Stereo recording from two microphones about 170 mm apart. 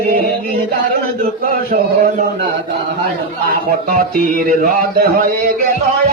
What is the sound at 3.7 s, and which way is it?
A man's voice, 55° right (ahead or behind).